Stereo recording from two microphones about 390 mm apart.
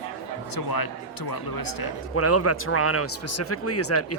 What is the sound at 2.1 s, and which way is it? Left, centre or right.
A man's voice, left.